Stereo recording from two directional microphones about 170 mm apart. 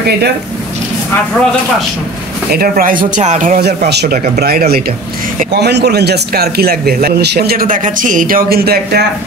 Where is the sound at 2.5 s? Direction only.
60° right (ahead or behind).